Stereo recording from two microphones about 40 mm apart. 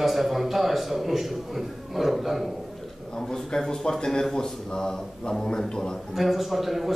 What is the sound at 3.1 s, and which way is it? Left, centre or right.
A man's voice, centre.